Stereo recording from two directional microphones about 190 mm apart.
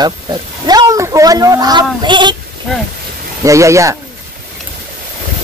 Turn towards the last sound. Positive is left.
turn(degrees=-15)  # may be behind; listen again after turning